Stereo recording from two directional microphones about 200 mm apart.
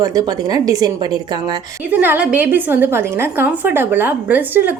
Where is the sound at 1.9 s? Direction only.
10° right (ahead or behind).